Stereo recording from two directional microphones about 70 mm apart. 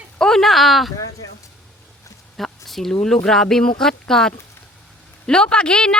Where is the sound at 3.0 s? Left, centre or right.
Centre.